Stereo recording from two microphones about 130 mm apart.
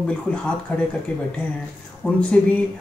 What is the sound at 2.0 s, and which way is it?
Speech, 10° left (ahead or behind).